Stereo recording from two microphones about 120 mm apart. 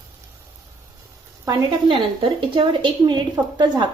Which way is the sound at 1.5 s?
35° right (ahead or behind).